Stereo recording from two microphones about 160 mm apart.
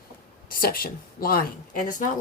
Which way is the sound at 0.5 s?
65° left (ahead or behind).